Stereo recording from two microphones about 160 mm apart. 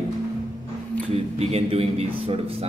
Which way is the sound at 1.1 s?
40° right (ahead or behind).